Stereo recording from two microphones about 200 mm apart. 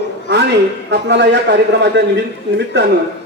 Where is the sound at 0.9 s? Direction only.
60° right (ahead or behind).